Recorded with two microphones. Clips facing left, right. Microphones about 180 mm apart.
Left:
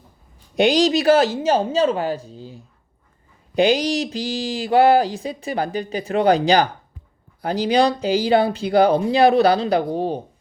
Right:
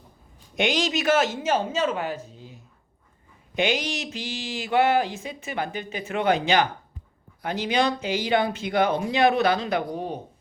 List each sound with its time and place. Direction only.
0.5 s speech: 35° left (ahead or behind)